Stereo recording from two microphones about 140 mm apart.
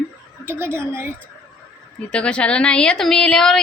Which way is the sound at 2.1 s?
5° left (ahead or behind).